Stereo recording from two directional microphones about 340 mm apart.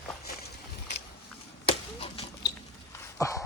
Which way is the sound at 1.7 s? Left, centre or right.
Centre.